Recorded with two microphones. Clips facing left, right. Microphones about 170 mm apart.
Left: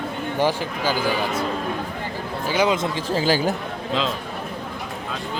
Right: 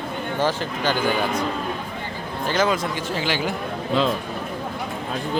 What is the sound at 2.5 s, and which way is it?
Speech, 10° left (ahead or behind).